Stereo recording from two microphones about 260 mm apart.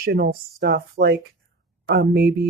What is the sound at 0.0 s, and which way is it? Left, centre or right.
Speech, right.